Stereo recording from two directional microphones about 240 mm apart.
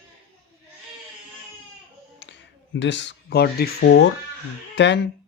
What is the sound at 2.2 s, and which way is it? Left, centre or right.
Speech, left.